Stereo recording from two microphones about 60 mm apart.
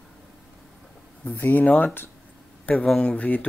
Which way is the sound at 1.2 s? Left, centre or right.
Left.